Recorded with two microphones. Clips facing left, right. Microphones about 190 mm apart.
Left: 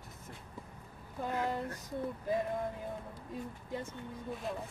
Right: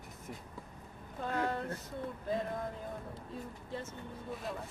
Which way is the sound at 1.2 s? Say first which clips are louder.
Even; 15° left (ahead or behind).